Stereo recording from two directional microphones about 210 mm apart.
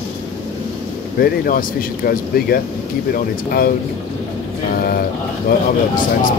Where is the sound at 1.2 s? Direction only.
40° left (ahead or behind).